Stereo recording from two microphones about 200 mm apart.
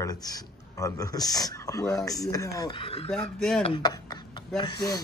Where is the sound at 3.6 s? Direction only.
25° left (ahead or behind).